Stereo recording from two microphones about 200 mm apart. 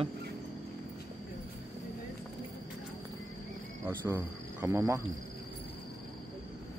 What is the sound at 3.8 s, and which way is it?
Cricket, 10° right (ahead or behind).